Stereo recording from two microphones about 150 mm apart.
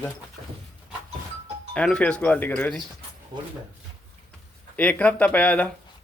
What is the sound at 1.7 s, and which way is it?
Speech, 5° left (ahead or behind).